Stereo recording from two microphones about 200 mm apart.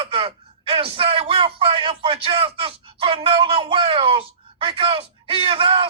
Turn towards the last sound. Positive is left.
turn(degrees=-25)  # may be behind; listen again after turning